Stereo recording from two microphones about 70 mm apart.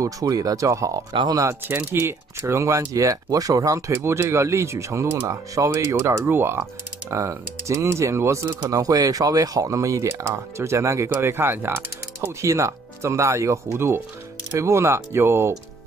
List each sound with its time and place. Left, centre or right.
0.0 s speech: right
1.7 s speech: right
5.9 s speech: right
7.1 s speech: right
8.6 s speech: right